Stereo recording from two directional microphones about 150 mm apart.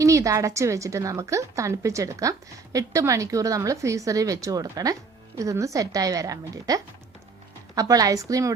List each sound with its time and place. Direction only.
0.0 s a woman's voice: 20° right (ahead or behind)